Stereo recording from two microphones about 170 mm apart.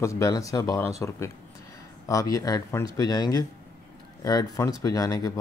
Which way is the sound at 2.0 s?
20° left (ahead or behind).